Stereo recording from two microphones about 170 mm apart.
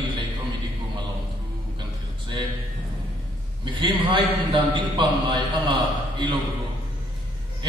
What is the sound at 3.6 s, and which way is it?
A man's voice, 30° right (ahead or behind).